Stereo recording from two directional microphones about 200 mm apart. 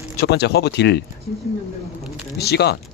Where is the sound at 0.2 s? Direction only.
55° left (ahead or behind).